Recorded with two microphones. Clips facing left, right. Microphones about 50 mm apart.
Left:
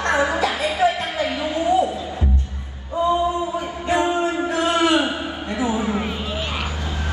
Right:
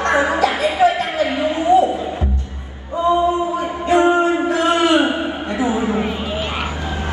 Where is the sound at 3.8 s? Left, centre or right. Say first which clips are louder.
Right 6 dB; right.